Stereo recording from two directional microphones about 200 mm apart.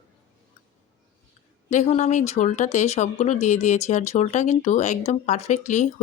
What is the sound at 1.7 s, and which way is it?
Speech, 35° left (ahead or behind).